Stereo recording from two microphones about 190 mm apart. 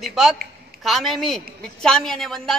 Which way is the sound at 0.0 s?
Centre (ahead or behind).